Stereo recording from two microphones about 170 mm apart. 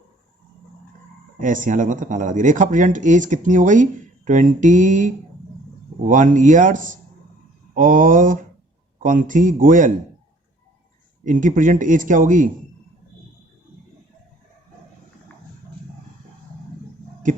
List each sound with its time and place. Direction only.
1.4 s speech: 50° right (ahead or behind)
11.3 s speech: 50° right (ahead or behind)